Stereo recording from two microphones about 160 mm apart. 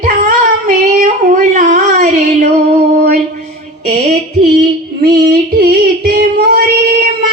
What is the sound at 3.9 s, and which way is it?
Female singing, 40° right (ahead or behind).